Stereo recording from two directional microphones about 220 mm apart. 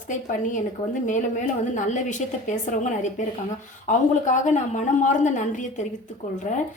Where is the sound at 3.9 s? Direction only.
35° left (ahead or behind).